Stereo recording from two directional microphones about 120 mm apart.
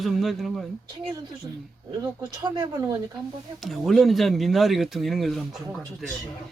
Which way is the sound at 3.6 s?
Centre (ahead or behind).